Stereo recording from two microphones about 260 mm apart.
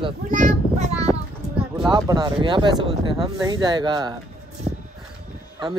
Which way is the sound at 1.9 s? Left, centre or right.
Centre.